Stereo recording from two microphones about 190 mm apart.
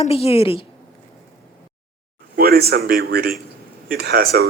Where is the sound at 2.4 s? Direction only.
55° right (ahead or behind).